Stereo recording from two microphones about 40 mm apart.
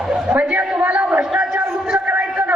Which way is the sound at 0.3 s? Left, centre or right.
Right.